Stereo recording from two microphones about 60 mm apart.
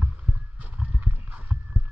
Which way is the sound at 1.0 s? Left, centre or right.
Right.